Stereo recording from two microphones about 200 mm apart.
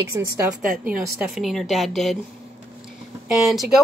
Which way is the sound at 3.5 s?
Centre (ahead or behind).